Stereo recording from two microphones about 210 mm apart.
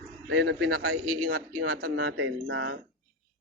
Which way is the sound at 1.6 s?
45° right (ahead or behind).